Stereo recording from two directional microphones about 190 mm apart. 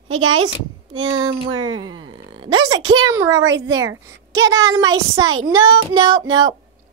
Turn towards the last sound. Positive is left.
turn(degrees=-20)  # may be behind; listen again after turning